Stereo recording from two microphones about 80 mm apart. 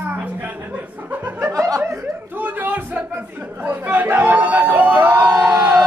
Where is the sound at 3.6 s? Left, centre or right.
Right.